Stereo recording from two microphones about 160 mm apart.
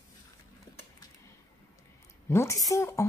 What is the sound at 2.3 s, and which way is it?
Speech, 15° left (ahead or behind).